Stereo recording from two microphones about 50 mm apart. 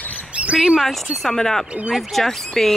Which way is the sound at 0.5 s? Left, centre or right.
Centre.